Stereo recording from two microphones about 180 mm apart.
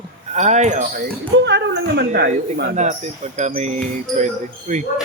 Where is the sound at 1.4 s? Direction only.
75° right (ahead or behind).